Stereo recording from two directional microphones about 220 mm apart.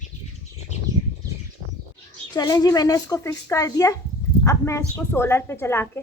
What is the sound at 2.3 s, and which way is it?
A woman's voice, 15° left (ahead or behind).